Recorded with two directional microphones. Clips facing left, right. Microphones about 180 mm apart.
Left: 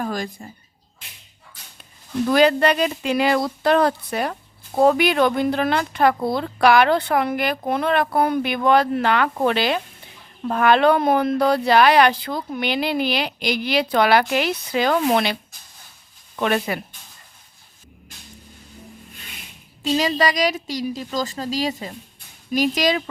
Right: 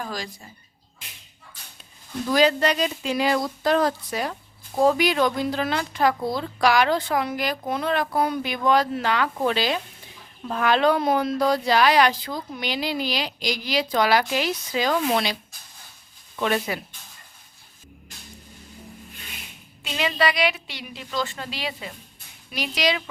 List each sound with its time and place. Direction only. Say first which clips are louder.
0.0 s speech: left 6 dB; 55° left (ahead or behind)
2.3 s speech: left 3 dB; 60° left (ahead or behind)
16.4 s speech: left 3 dB; 55° left (ahead or behind)
19.8 s a woman's voice: left 4 dB; 40° left (ahead or behind)